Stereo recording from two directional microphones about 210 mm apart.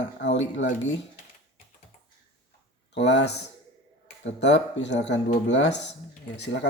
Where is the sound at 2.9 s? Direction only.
55° left (ahead or behind).